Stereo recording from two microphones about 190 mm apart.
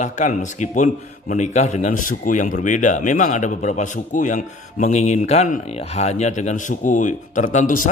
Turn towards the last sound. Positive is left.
turn(degrees=45)  # may be behind; listen again after turning